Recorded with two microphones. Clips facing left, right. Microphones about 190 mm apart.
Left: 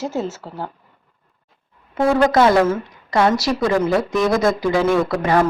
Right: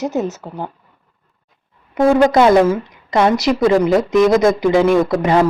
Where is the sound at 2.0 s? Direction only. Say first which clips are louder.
Right 3 dB; 20° right (ahead or behind).